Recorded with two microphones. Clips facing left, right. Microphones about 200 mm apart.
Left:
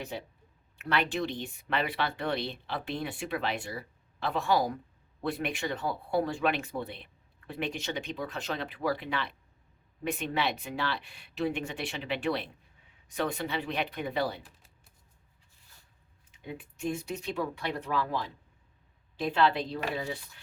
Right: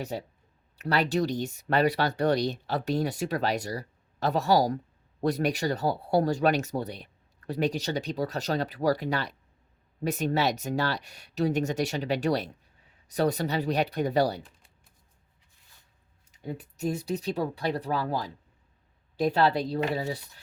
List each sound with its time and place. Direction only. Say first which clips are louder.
0.8 s speech: right 4 dB; 40° right (ahead or behind)
16.4 s speech: right 4 dB; 40° right (ahead or behind)